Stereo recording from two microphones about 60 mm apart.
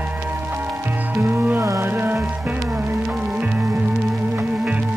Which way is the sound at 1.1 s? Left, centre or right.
Right.